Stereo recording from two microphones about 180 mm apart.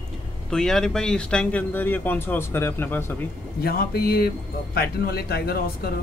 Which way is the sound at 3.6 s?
60° left (ahead or behind).